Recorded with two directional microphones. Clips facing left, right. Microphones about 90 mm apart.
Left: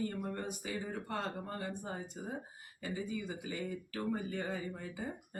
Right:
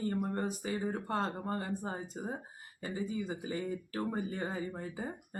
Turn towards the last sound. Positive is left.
turn(degrees=-35)  # may be behind; listen again after turning